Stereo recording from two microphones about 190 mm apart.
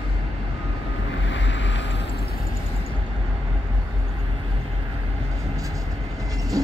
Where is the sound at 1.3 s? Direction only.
70° left (ahead or behind).